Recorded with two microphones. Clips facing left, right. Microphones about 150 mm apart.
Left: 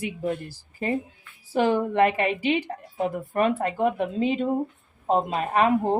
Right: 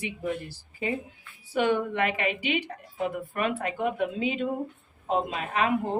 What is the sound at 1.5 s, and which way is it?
Speech, 35° left (ahead or behind).